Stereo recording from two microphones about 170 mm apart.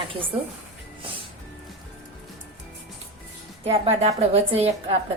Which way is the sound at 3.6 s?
35° right (ahead or behind).